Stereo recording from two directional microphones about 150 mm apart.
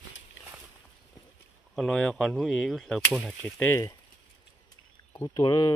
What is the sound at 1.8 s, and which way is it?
Speech, 5° left (ahead or behind).